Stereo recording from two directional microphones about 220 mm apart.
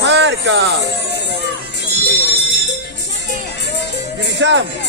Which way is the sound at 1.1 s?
50° left (ahead or behind).